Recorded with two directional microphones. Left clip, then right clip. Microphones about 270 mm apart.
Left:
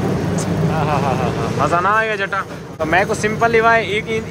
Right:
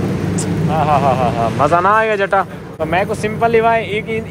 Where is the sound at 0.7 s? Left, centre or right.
Centre.